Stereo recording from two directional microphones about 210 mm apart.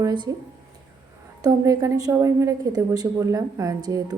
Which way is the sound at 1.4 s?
15° right (ahead or behind).